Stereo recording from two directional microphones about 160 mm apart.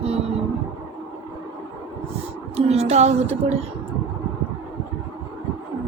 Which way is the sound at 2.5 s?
40° right (ahead or behind).